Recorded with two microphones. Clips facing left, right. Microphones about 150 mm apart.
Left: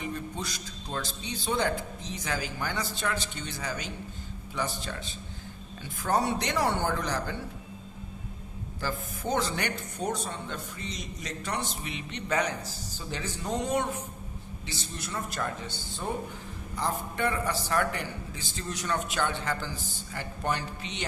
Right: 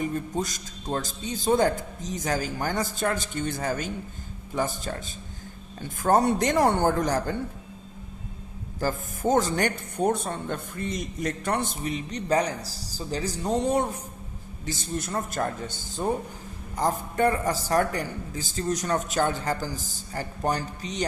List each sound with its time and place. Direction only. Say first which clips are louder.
0.0 s a man's voice: right 7 dB; 45° right (ahead or behind)
8.8 s a man's voice: right 7 dB; 45° right (ahead or behind)